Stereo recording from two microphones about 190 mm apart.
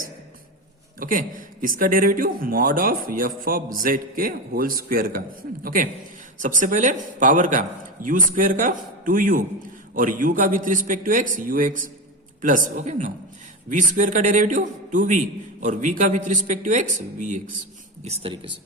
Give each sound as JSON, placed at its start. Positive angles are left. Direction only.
{"t": 0.9, "sound": "a man's voice", "side_deg": -45}